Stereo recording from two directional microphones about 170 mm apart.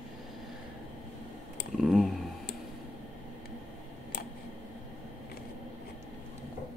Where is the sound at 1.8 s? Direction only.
5° right (ahead or behind).